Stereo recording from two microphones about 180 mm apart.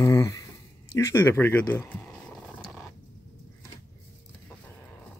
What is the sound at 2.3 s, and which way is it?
Dog, centre (ahead or behind).